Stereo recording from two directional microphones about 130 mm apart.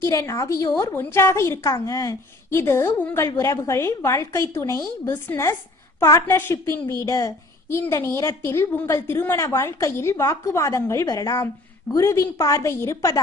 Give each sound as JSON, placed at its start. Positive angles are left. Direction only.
{"t": 0.0, "sound": "a woman's voice", "side_deg": 25}